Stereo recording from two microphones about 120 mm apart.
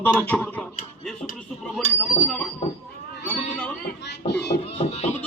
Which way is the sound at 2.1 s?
60° left (ahead or behind).